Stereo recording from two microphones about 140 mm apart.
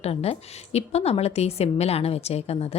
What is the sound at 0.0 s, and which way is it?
A woman's voice, 45° left (ahead or behind).